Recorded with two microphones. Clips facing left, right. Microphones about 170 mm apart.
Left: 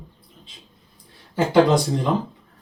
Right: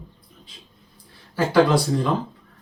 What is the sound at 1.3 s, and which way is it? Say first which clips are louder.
Speech: left 1 dB; 20° left (ahead or behind).